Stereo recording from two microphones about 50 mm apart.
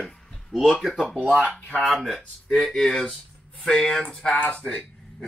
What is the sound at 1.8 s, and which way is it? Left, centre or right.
A man's voice, centre.